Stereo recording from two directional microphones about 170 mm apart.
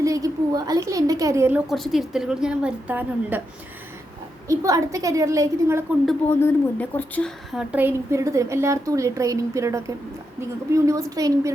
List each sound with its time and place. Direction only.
0.0 s a woman's voice: 20° right (ahead or behind)
4.4 s a woman's voice: 20° right (ahead or behind)
6.4 s a woman's voice: 10° left (ahead or behind); by 11.5 s 20° right (ahead or behind)